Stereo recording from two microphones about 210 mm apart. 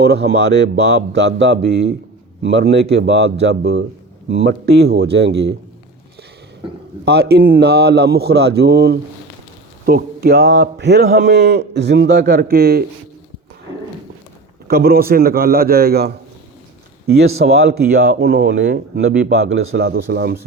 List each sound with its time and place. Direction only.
0.0 s a man's voice: 50° right (ahead or behind)
3.4 s a man's voice: 50° right (ahead or behind)
7.0 s a man's voice: 50° right (ahead or behind)
14.7 s a man's voice: 45° right (ahead or behind)
19.5 s a man's voice: 70° right (ahead or behind)
19.8 s a man's voice: 45° right (ahead or behind)